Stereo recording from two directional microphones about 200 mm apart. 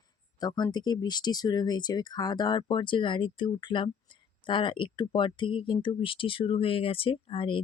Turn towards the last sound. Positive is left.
turn(degrees=25)  # may be behind; listen again after turning